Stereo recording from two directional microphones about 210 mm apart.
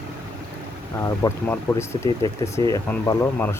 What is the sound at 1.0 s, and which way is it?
Speech, 15° left (ahead or behind).